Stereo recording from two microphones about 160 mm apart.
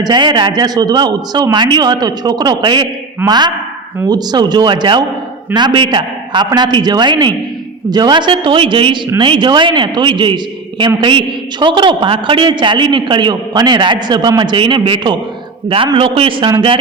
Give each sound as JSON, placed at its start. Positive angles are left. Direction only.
{"t": 0.0, "sound": "a man's voice", "side_deg": -30}